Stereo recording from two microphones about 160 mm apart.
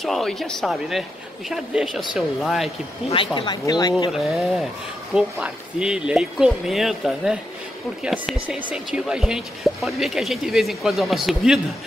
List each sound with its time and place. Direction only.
0.0 s speech: centre (ahead or behind)
3.1 s speech: 30° left (ahead or behind)
4.2 s speech: centre (ahead or behind)